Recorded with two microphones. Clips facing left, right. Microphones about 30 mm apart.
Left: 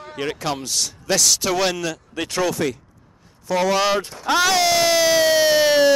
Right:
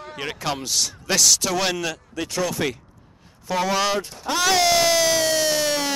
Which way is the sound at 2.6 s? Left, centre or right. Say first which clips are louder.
Left 2 dB; right.